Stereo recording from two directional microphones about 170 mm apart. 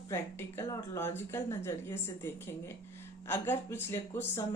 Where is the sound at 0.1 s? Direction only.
15° left (ahead or behind).